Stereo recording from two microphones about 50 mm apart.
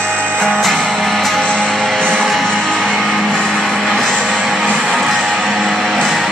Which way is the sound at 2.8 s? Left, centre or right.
Centre.